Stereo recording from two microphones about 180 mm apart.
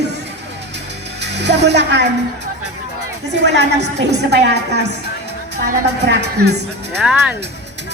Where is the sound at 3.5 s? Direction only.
70° right (ahead or behind).